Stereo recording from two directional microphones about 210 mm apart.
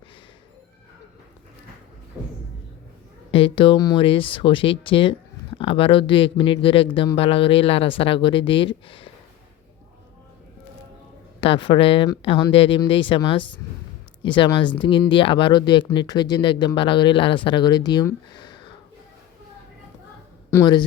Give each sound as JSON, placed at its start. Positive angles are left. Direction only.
{"t": 3.3, "sound": "speech", "side_deg": 25}
{"t": 11.3, "sound": "speech", "side_deg": 25}
{"t": 20.5, "sound": "speech", "side_deg": 15}